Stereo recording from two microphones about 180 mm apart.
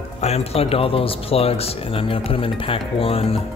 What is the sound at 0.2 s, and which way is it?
Speech, 35° left (ahead or behind).